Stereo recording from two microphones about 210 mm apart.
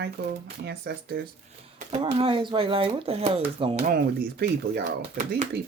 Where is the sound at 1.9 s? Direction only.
25° right (ahead or behind).